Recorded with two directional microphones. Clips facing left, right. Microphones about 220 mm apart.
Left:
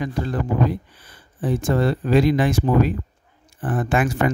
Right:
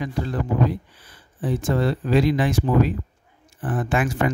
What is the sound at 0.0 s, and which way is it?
Speech, 50° left (ahead or behind).